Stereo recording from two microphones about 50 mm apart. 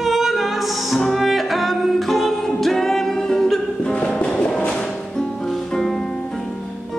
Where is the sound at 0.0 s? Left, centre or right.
Centre.